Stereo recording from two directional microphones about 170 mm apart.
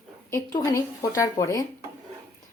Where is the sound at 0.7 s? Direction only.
20° left (ahead or behind).